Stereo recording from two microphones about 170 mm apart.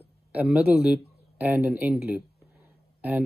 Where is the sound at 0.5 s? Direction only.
10° right (ahead or behind).